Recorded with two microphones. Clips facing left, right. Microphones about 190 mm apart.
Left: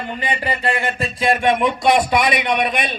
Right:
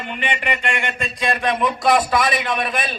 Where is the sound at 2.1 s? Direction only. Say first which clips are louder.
Left 2 dB; 20° left (ahead or behind).